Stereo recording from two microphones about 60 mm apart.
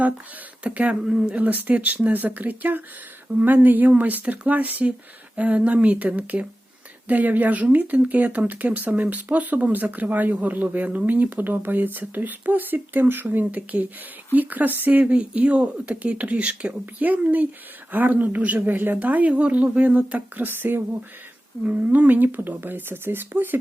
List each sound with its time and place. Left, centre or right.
0.6 s speech: right
1.0 s speech: centre
1.4 s speech: right
15.0 s speech: centre; by 20.8 s right
21.7 s speech: right